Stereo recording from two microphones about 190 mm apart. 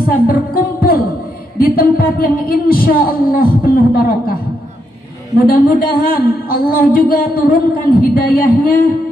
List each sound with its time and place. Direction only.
0.0 s speech: 50° left (ahead or behind)
5.5 s speech: 50° left (ahead or behind)